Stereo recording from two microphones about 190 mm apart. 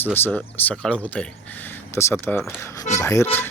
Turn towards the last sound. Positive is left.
turn(degrees=15)  # may be behind; listen again after turning